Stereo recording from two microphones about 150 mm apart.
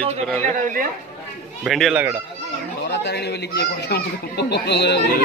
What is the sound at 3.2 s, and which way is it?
Speech, 90° left.